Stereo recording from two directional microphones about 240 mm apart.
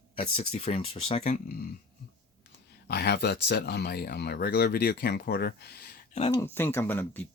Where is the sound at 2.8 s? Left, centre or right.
Left.